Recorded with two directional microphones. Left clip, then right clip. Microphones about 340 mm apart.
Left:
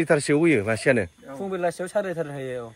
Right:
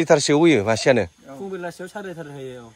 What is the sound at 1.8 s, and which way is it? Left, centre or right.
Speech, left.